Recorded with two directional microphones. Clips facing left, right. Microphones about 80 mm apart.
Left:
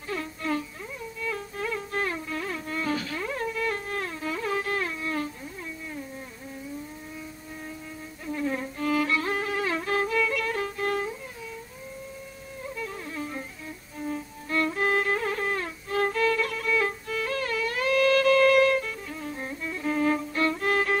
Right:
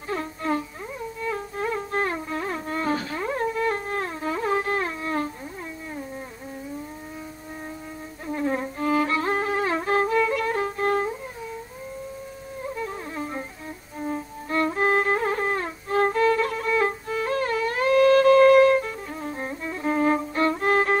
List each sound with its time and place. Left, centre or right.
0.1 s music: right
8.3 s violin: right
12.7 s music: right